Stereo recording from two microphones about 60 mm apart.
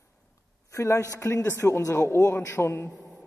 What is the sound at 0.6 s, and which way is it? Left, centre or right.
Speech, left.